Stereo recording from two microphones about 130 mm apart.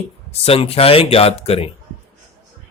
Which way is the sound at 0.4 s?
50° left (ahead or behind).